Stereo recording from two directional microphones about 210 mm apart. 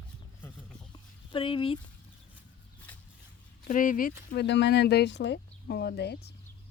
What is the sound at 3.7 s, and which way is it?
Speech, 40° left (ahead or behind).